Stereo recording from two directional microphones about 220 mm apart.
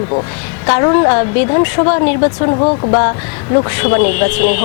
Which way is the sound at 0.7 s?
20° left (ahead or behind).